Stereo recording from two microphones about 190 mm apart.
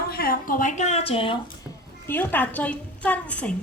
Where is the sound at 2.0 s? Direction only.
10° left (ahead or behind).